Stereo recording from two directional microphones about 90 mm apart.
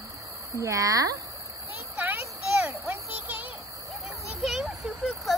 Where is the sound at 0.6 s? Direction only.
35° right (ahead or behind).